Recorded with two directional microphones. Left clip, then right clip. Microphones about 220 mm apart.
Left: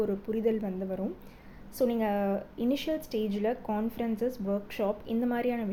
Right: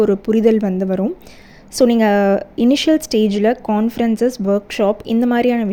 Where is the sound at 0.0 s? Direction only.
40° right (ahead or behind).